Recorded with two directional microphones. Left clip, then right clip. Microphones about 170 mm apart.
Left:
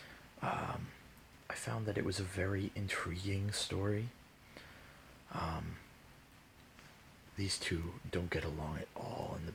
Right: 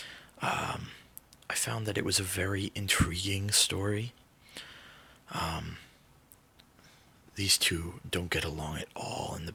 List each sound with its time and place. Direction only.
0.0 s a sound: 30° right (ahead or behind)
1.5 s speech: 30° right (ahead or behind)
5.3 s speech: 30° right (ahead or behind)
7.3 s speech: 30° right (ahead or behind)